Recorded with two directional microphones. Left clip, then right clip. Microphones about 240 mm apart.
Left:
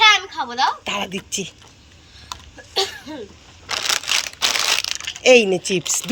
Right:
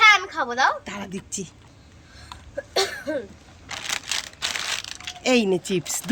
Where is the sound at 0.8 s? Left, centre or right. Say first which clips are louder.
Left 10 dB; centre.